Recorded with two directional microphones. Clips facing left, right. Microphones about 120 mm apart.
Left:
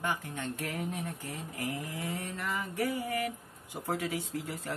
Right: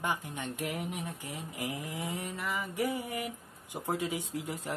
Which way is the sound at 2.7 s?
20° right (ahead or behind).